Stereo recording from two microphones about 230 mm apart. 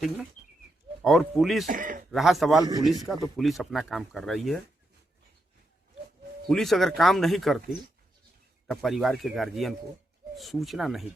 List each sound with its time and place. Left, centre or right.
1.0 s speech: centre
1.6 s speech: right
2.0 s speech: centre
6.5 s speech: centre
8.6 s speech: centre